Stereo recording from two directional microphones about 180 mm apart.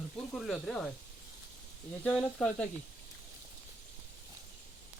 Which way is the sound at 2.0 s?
5° left (ahead or behind).